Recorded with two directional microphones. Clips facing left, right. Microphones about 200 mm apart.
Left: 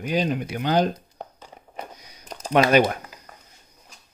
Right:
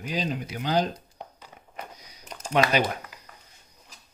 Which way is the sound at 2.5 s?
55° left (ahead or behind).